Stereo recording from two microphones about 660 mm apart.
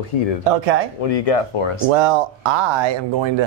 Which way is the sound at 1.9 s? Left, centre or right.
Right.